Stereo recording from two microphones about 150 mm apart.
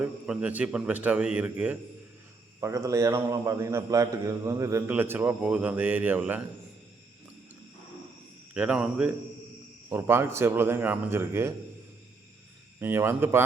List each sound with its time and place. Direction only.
0.0 s speech: 10° right (ahead or behind)
2.6 s a man's voice: 20° right (ahead or behind)
8.5 s speech: 10° right (ahead or behind)
12.8 s speech: 15° right (ahead or behind)